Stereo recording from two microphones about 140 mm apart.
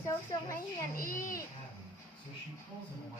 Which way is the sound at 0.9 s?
90° left.